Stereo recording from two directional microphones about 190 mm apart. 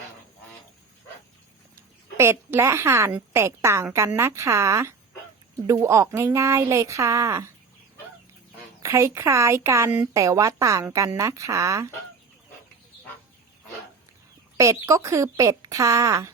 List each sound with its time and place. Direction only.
2.1 s speech: 15° right (ahead or behind)
8.8 s speech: 15° right (ahead or behind)
14.6 s speech: 15° right (ahead or behind)